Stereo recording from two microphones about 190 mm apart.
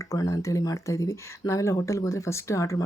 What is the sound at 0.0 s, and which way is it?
Speech, 15° left (ahead or behind).